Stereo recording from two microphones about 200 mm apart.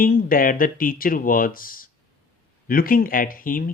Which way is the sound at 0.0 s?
45° left (ahead or behind).